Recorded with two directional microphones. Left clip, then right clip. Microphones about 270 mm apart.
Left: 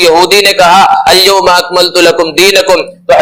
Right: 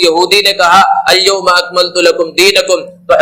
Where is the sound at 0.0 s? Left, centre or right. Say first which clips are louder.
Left 4 dB; left.